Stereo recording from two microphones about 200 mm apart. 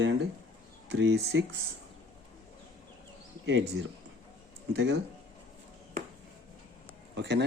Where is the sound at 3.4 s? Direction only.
65° right (ahead or behind).